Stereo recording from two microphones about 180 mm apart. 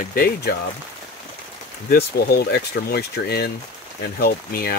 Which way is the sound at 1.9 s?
60° left (ahead or behind).